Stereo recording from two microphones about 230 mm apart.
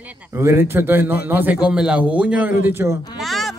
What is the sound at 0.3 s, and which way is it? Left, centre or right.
A man's voice, centre.